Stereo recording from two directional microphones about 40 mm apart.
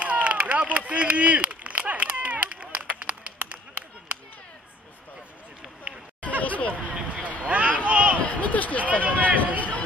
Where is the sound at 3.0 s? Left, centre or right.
Right.